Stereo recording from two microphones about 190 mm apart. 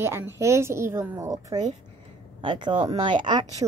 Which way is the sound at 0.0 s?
15° right (ahead or behind).